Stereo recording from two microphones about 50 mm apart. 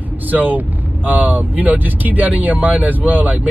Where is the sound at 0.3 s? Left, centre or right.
Right.